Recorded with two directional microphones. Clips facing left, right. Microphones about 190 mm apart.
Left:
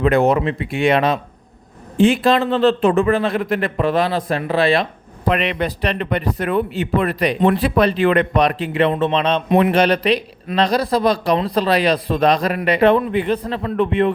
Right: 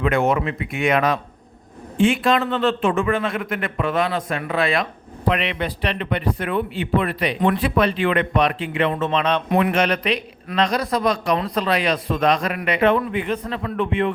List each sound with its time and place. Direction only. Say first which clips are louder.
0.0 s a man's voice: left 4 dB; 35° left (ahead or behind)
5.3 s a man's voice: left 4 dB; 45° left (ahead or behind)